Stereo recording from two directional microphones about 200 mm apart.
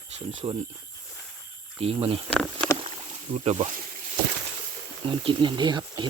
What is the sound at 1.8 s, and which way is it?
Speech, 30° right (ahead or behind).